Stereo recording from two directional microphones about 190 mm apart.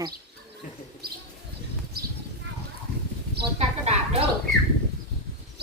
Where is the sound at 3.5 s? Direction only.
35° right (ahead or behind).